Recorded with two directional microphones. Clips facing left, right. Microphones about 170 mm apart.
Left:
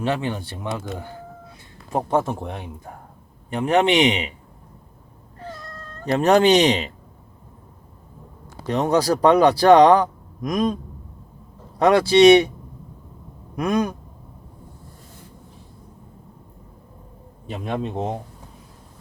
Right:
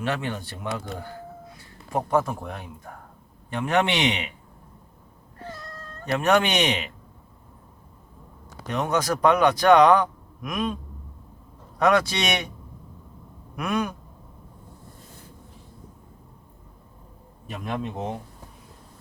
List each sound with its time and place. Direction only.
0.0 s speech: 20° left (ahead or behind)
6.1 s speech: 35° left (ahead or behind)
8.6 s speech: 35° left (ahead or behind)
11.8 s speech: 30° left (ahead or behind)
13.6 s speech: 35° left (ahead or behind)
17.4 s speech: 30° left (ahead or behind)